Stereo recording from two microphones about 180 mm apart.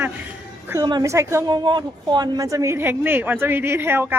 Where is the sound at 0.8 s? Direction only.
20° right (ahead or behind).